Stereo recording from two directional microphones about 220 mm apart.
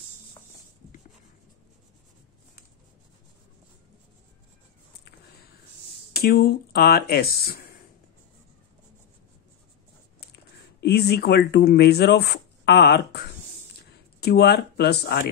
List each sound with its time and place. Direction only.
6.1 s speech: 45° left (ahead or behind)
10.8 s speech: 45° left (ahead or behind)